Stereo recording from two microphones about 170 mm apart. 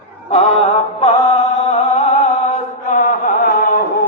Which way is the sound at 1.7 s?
45° left (ahead or behind).